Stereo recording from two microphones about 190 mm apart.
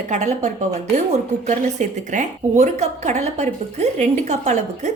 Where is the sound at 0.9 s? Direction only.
35° right (ahead or behind).